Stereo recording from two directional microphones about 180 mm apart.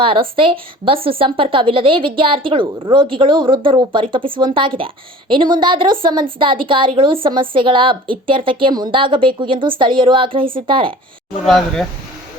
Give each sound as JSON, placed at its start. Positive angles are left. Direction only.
{"t": 0.0, "sound": "a woman's voice", "side_deg": -30}
{"t": 11.4, "sound": "speech", "side_deg": 0}